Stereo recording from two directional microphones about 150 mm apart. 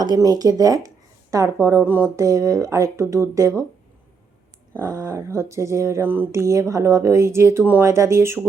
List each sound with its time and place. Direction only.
0.0 s speech: 25° right (ahead or behind)
4.8 s speech: 20° right (ahead or behind)